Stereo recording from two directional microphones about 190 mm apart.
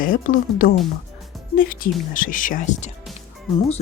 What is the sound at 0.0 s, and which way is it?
Speech, 45° left (ahead or behind).